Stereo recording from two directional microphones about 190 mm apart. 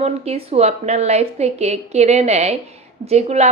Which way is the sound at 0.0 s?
35° right (ahead or behind).